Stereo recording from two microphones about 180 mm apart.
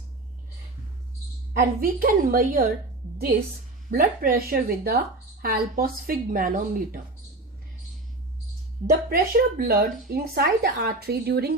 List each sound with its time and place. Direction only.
1.5 s speech: 55° right (ahead or behind)
3.9 s a woman's voice: 55° right (ahead or behind)
9.0 s a woman's voice: 55° right (ahead or behind)